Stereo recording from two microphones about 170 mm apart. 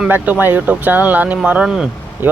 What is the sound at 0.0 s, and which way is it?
Speech, 10° right (ahead or behind).